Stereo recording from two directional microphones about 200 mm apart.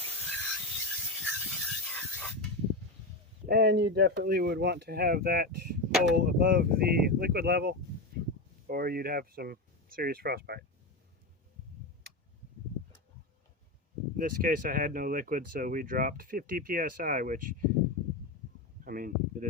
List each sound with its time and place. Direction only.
0.0 s a sound: 10° left (ahead or behind)
3.4 s speech: 50° right (ahead or behind)
5.9 s speech: centre (ahead or behind)
6.1 s speech: 45° right (ahead or behind)
14.2 s speech: 45° right (ahead or behind)
18.9 s a sound: 45° right (ahead or behind)